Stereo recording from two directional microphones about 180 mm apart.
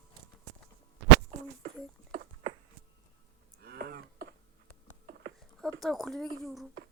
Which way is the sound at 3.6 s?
60° right (ahead or behind).